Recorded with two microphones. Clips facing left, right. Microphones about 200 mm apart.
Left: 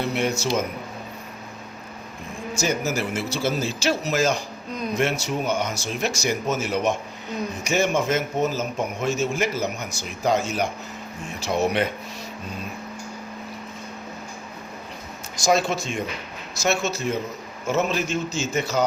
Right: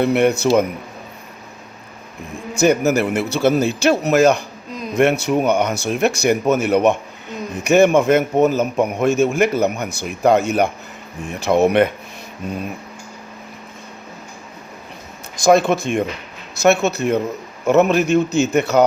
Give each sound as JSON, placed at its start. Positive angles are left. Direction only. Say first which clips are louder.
{"t": 0.0, "sound": "a man's voice", "louder": "right 9 dB", "side_deg": -60}
{"t": 2.6, "sound": "a man's voice", "louder": "right 10 dB", "side_deg": -60}
{"t": 15.4, "sound": "a man's voice", "louder": "right 8 dB", "side_deg": -55}